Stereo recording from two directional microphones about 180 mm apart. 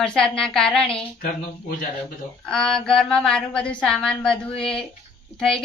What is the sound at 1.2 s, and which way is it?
Speech, 55° left (ahead or behind).